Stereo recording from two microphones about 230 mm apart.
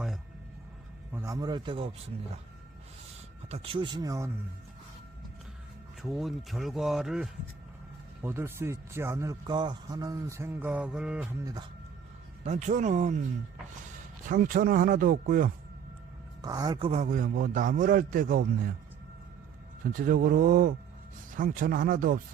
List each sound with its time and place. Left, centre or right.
1.1 s a man's voice: centre
3.5 s speech: right
6.0 s a man's voice: centre
12.5 s a man's voice: right
14.3 s a man's voice: right
16.4 s a man's voice: centre
16.9 s a man's voice: right
19.8 s a man's voice: right